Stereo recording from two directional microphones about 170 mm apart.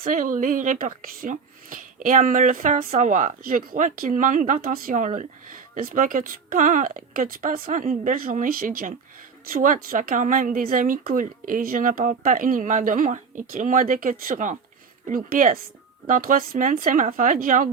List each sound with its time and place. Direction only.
0.0 s speech: 50° right (ahead or behind)